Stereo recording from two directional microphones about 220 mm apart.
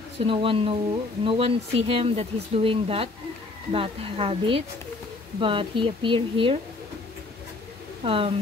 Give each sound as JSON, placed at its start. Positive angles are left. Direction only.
{"t": 0.2, "sound": "speech", "side_deg": -25}
{"t": 8.0, "sound": "speech", "side_deg": -25}